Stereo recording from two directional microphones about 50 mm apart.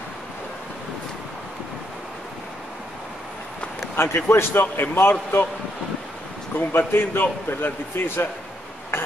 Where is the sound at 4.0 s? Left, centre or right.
Left.